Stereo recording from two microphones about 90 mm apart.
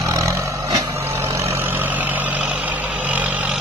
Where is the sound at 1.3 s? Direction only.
25° right (ahead or behind).